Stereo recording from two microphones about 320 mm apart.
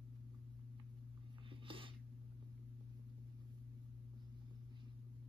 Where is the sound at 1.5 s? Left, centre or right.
Centre.